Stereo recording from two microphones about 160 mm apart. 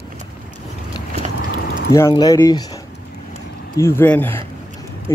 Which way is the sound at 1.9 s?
20° left (ahead or behind).